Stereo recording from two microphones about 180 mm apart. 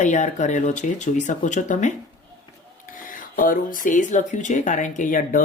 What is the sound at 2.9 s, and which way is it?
Speech, 50° left (ahead or behind).